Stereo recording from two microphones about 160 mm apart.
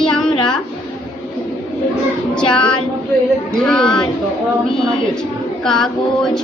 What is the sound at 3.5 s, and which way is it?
Speech, 5° left (ahead or behind).